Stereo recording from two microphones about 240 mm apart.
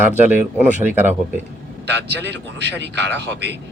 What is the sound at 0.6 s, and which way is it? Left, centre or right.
Speech, right.